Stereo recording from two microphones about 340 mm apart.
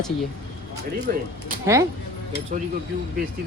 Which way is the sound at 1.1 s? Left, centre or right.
Right.